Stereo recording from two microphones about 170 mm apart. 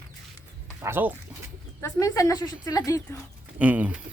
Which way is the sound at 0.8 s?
15° right (ahead or behind).